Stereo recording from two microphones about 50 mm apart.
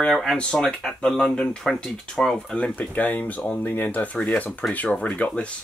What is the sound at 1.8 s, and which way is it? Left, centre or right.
Cap gun, centre.